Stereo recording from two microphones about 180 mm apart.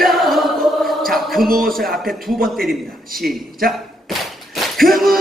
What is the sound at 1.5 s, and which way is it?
Speech, 55° right (ahead or behind).